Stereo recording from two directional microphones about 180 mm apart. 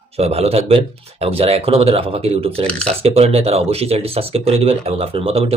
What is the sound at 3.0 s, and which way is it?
Speech, 35° right (ahead or behind).